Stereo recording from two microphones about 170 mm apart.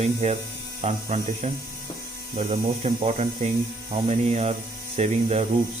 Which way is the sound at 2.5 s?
40° right (ahead or behind).